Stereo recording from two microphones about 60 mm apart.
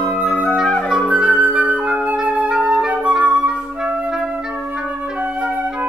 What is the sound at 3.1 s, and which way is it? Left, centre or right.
Flute, centre.